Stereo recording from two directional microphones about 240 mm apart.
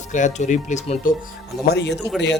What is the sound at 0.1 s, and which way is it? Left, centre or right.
Speech, left.